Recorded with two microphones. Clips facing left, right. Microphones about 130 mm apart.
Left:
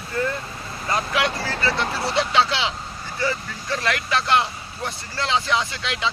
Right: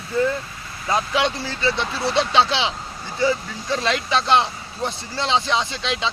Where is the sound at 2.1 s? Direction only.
20° right (ahead or behind).